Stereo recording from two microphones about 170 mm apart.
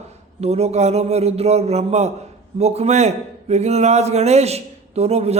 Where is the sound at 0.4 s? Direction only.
40° right (ahead or behind).